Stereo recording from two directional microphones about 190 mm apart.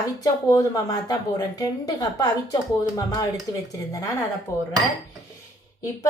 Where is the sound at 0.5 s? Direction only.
20° left (ahead or behind).